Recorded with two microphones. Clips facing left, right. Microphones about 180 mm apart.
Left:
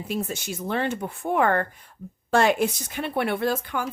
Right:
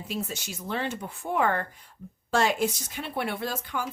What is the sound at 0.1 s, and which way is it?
Speech, 55° left (ahead or behind).